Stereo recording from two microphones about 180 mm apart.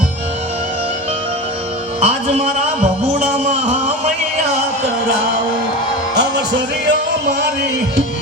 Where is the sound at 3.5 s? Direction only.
35° right (ahead or behind).